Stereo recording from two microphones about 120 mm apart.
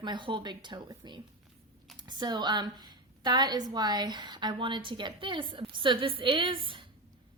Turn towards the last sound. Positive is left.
turn(degrees=-45)  # may be behind; listen again after turning